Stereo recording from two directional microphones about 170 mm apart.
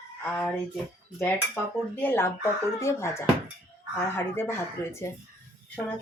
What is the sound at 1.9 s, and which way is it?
Speech, 10° left (ahead or behind).